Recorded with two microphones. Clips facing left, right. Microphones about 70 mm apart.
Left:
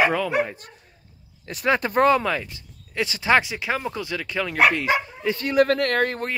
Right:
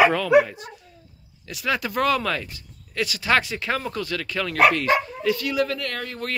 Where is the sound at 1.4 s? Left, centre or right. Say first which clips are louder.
Left 4 dB; left.